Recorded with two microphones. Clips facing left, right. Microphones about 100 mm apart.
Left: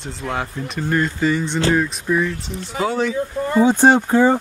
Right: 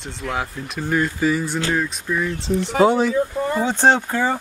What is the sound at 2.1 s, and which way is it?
Speech, 15° left (ahead or behind).